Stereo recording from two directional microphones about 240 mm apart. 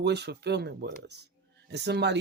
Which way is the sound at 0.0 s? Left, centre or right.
Right.